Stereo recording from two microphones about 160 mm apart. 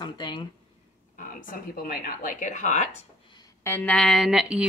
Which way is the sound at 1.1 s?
65° left (ahead or behind).